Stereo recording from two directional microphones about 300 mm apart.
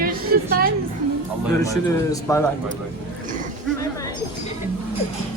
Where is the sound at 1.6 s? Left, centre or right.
Centre.